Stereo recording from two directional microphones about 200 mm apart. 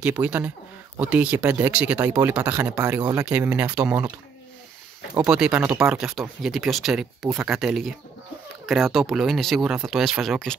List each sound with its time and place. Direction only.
0.0 s speech: 5° right (ahead or behind)
3.3 s speech: 5° right (ahead or behind)
5.1 s speech: 5° right (ahead or behind)